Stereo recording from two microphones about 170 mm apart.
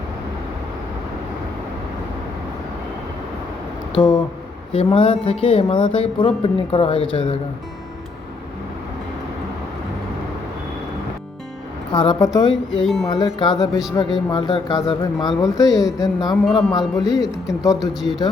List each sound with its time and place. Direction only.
3.9 s speech: 25° left (ahead or behind)
11.9 s speech: 30° left (ahead or behind)
12.8 s speech: centre (ahead or behind)
13.1 s speech: 25° left (ahead or behind)
16.5 s speech: centre (ahead or behind)
17.0 s speech: 20° left (ahead or behind)